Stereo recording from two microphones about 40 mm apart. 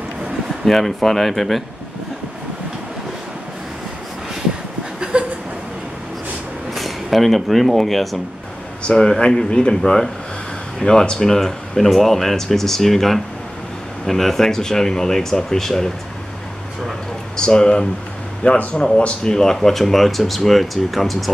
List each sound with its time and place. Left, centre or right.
0.7 s speech: centre
5.1 s a sound: right
6.7 s speech: centre
8.8 s speech: centre
10.8 s speech: centre
17.4 s speech: left
18.4 s speech: left
18.9 s speech: left; by 21.3 s centre